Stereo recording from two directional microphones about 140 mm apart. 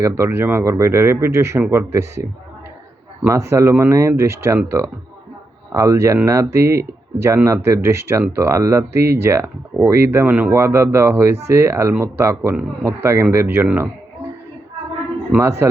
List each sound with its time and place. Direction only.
0.0 s speech: 20° right (ahead or behind)
3.2 s speech: 20° right (ahead or behind)
15.3 s speech: 15° right (ahead or behind)